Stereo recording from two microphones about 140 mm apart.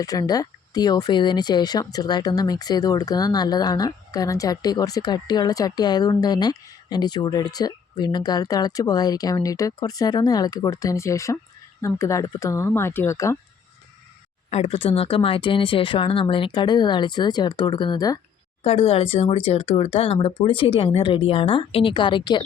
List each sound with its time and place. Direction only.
0.0 s speech: 25° left (ahead or behind)
14.5 s speech: 45° left (ahead or behind); by 18.2 s 30° left (ahead or behind)
18.6 s speech: 45° left (ahead or behind)